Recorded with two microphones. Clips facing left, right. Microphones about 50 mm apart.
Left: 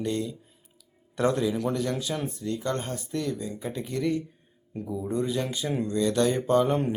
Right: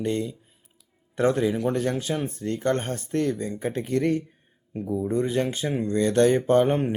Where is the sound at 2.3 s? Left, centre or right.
Right.